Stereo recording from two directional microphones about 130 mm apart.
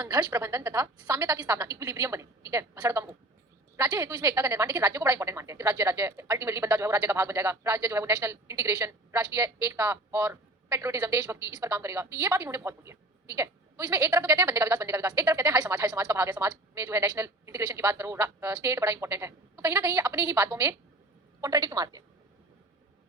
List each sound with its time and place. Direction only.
0.1 s a woman's voice: 30° right (ahead or behind)